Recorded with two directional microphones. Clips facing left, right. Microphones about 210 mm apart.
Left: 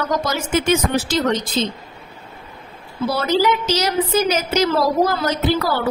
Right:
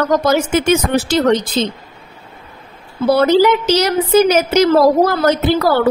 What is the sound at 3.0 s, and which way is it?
A woman's voice, 60° right (ahead or behind).